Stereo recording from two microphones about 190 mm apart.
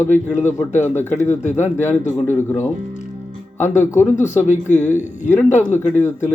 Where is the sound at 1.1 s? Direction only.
40° left (ahead or behind).